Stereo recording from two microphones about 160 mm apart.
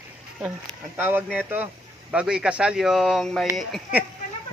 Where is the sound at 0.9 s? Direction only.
10° right (ahead or behind).